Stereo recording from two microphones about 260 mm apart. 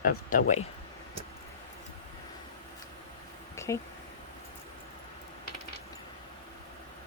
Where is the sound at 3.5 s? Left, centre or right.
Centre.